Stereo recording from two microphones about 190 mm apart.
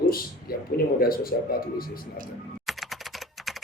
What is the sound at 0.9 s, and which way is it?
Speech, 50° left (ahead or behind).